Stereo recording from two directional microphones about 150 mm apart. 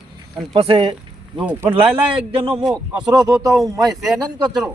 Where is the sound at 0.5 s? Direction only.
35° right (ahead or behind).